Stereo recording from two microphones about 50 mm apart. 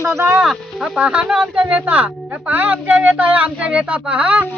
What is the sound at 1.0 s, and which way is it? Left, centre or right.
Speech, right.